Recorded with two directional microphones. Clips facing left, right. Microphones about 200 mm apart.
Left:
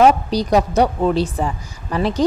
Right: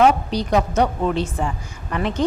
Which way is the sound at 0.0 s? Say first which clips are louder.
Left 3 dB; 40° left (ahead or behind).